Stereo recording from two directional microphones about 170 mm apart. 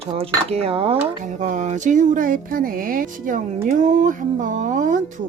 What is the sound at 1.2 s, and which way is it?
Speech, 50° right (ahead or behind).